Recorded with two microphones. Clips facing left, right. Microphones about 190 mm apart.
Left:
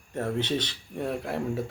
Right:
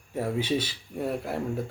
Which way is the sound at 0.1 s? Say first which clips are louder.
Right 1 dB; 10° right (ahead or behind).